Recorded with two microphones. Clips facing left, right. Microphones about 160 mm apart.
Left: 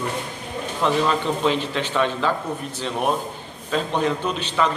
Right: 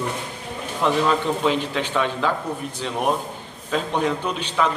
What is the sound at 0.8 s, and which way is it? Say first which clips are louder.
A man's voice: right 1 dB; 10° right (ahead or behind).